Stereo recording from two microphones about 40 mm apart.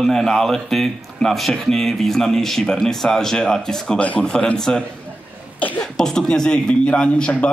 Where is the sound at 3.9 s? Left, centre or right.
Left.